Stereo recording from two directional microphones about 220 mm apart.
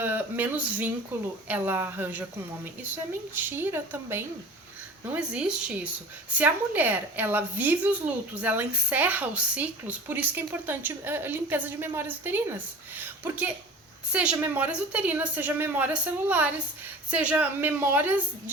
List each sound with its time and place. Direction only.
0.0 s a woman's voice: 10° right (ahead or behind)